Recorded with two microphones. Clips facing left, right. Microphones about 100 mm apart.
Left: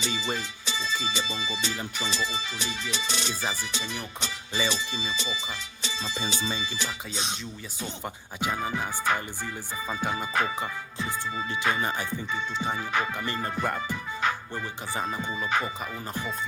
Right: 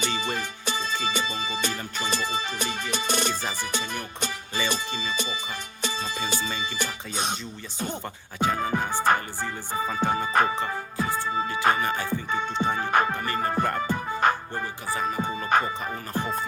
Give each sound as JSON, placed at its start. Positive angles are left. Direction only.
{"t": 0.0, "sound": "music", "side_deg": -55}
{"t": 2.0, "sound": "speech", "side_deg": -50}
{"t": 8.4, "sound": "speech", "side_deg": -50}
{"t": 11.8, "sound": "music", "side_deg": 20}
{"t": 12.0, "sound": "speech", "side_deg": -55}
{"t": 13.7, "sound": "music", "side_deg": -50}
{"t": 15.0, "sound": "speech", "side_deg": -50}